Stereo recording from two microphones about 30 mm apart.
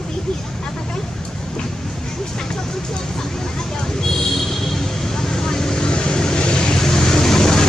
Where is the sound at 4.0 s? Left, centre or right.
Centre.